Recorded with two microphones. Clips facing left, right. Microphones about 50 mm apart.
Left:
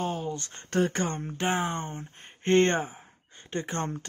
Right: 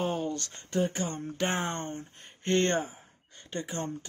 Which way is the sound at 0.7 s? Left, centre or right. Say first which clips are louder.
Left 3 dB; left.